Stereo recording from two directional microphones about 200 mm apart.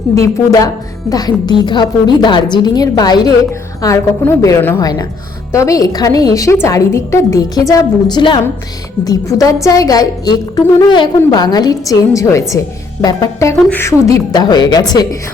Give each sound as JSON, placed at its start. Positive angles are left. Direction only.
{"t": 0.1, "sound": "a woman's voice", "side_deg": 15}